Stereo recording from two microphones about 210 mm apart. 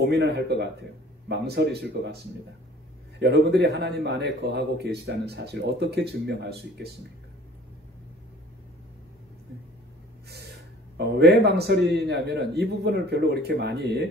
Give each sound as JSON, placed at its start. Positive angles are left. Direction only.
{"t": 0.0, "sound": "a man's voice", "side_deg": -50}
{"t": 3.2, "sound": "a man's voice", "side_deg": -50}
{"t": 11.0, "sound": "a man's voice", "side_deg": -50}